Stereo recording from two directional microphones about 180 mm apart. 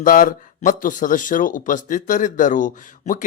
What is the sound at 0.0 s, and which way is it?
Speech, 50° left (ahead or behind).